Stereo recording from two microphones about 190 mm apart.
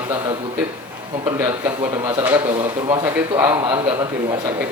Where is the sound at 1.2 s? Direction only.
10° right (ahead or behind).